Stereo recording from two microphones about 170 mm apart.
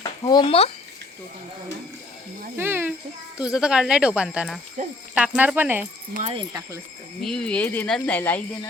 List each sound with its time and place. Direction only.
0.0 s speech: 25° left (ahead or behind)
2.6 s speech: 10° right (ahead or behind)
7.2 s speech: centre (ahead or behind)